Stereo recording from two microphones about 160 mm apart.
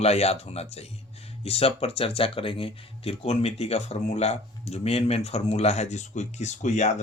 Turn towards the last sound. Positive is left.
turn(degrees=45)  # may be behind; listen again after turning